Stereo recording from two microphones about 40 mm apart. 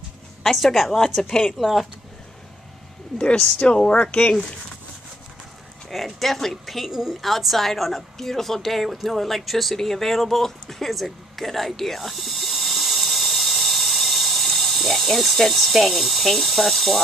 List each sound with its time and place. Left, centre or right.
0.4 s a woman's voice: centre
3.5 s speech: left
3.9 s speech: left
5.9 s speech: centre
6.9 s a woman's voice: centre
7.2 s speech: centre
10.9 s a sound: centre